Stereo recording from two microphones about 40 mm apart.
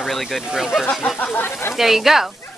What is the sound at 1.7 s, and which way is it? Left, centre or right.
Speech, centre.